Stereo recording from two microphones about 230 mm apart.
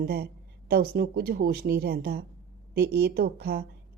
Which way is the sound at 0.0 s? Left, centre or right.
Right.